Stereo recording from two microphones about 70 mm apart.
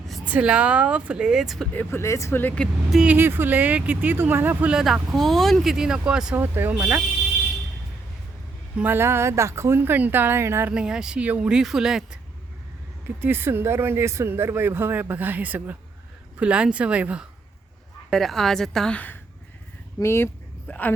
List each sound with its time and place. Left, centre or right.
0.3 s speech: centre
1.7 s speech: left
2.0 s speech: left
2.6 s speech: centre
3.2 s speech: right
4.7 s speech: centre
6.3 s speech: right
8.8 s speech: right
10.7 s speech: centre
13.2 s speech: right
18.1 s speech: centre
18.9 s speech: left
20.0 s speech: left
20.7 s speech: left